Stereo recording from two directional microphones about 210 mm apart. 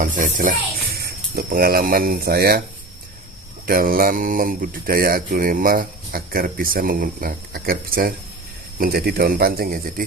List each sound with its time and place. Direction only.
0.0 s music: 40° right (ahead or behind)
0.9 s speech: 45° right (ahead or behind)
3.7 s speech: 45° right (ahead or behind)